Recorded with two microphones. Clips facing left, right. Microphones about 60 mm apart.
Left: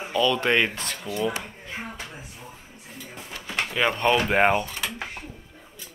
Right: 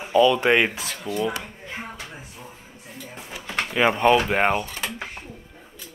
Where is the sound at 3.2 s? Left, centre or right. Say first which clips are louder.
Right 1 dB; centre.